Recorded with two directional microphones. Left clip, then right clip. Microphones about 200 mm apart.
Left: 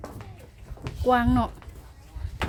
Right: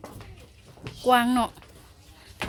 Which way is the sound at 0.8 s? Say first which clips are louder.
Right 1 dB; centre (ahead or behind).